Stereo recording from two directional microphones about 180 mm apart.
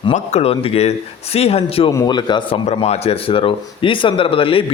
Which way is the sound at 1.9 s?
20° left (ahead or behind).